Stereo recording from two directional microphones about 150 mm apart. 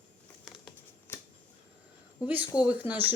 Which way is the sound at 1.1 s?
15° left (ahead or behind).